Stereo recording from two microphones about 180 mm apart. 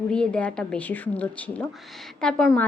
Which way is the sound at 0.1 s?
5° left (ahead or behind).